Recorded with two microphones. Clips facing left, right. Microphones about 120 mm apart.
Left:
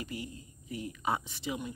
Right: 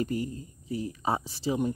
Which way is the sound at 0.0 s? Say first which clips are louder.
Right 10 dB; 40° right (ahead or behind).